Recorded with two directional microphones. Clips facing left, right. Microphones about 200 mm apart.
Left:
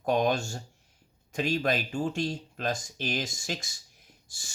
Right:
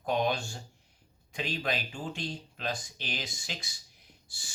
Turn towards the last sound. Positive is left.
turn(degrees=45)  # may be behind; listen again after turning